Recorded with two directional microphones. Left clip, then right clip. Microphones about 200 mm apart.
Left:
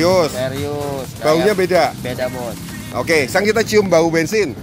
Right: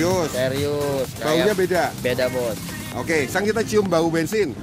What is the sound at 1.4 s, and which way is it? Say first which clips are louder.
Speech: left 6 dB; 10° left (ahead or behind).